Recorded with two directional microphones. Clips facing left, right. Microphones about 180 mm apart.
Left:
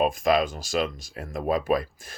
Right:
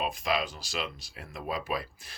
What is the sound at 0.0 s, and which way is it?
Speech, 45° left (ahead or behind).